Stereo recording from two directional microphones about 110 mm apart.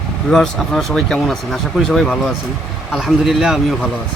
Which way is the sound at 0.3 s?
5° left (ahead or behind).